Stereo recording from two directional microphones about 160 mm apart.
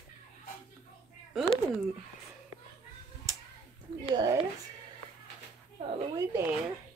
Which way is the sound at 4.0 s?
25° right (ahead or behind).